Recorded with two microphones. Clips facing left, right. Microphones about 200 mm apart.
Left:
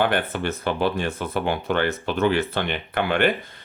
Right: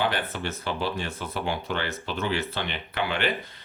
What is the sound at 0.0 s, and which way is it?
Speech, 55° left (ahead or behind).